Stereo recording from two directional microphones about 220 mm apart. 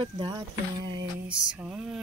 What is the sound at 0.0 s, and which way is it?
Speech, 20° right (ahead or behind).